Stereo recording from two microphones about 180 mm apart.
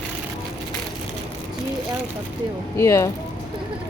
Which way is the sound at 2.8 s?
15° left (ahead or behind).